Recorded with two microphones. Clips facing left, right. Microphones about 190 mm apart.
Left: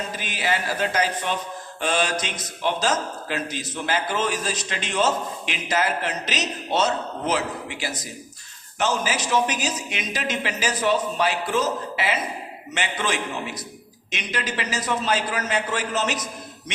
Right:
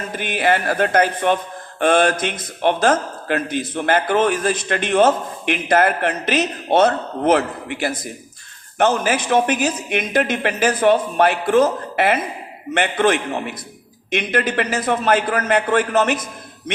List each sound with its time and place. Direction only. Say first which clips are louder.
0.1 s speech: right 7 dB; 55° right (ahead or behind)